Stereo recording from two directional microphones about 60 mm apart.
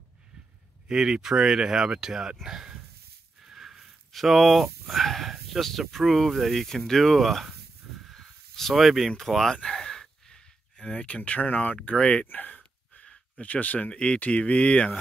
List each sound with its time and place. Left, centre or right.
0.8 s speech: centre
8.1 s snake: centre
9.1 s speech: centre